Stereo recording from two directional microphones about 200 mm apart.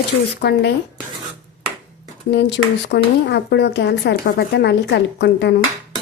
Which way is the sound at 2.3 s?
60° left (ahead or behind).